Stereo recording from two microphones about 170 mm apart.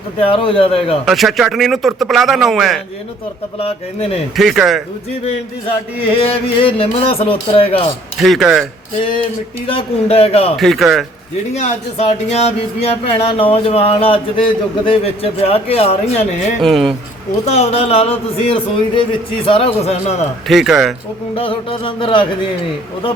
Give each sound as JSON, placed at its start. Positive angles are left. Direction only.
{"t": 0.2, "sound": "speech", "side_deg": 30}
{"t": 1.0, "sound": "a man's voice", "side_deg": 0}
{"t": 3.6, "sound": "speech", "side_deg": 35}
{"t": 4.4, "sound": "a man's voice", "side_deg": 0}
{"t": 6.2, "sound": "speech", "side_deg": 35}
{"t": 8.2, "sound": "a man's voice", "side_deg": 0}
{"t": 9.6, "sound": "speech", "side_deg": 35}
{"t": 10.6, "sound": "a man's voice", "side_deg": 0}
{"t": 11.5, "sound": "speech", "side_deg": 40}
{"t": 16.6, "sound": "a man's voice", "side_deg": 0}
{"t": 17.4, "sound": "speech", "side_deg": 40}
{"t": 20.5, "sound": "a man's voice", "side_deg": 0}
{"t": 21.3, "sound": "music", "side_deg": 30}